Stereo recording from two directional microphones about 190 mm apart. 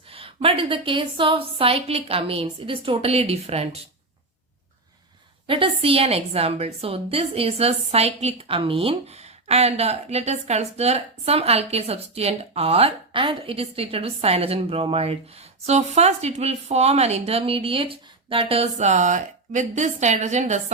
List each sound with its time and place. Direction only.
0.1 s a woman's voice: 30° right (ahead or behind)
5.5 s a woman's voice: 30° right (ahead or behind)